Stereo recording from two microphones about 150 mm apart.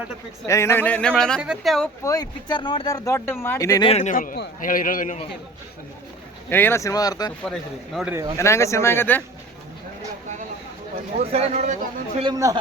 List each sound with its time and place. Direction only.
0.4 s speech: 20° left (ahead or behind); by 1.9 s centre (ahead or behind)
2.0 s speech: 25° left (ahead or behind)
3.8 s a man's voice: 45° left (ahead or behind)
4.1 s a man's voice: 65° left (ahead or behind)
6.5 s speech: 15° left (ahead or behind)
7.4 s speech: centre (ahead or behind)
8.4 s speech: 20° left (ahead or behind)
11.2 s speech: 40° right (ahead or behind)
12.2 s speech: 25° right (ahead or behind)